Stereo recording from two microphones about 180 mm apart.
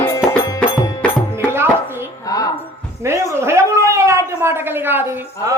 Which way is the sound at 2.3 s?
20° left (ahead or behind).